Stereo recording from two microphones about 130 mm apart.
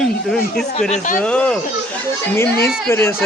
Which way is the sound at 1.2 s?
10° left (ahead or behind).